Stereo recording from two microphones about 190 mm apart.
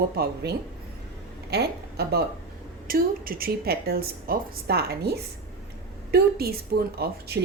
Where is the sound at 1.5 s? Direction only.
60° right (ahead or behind).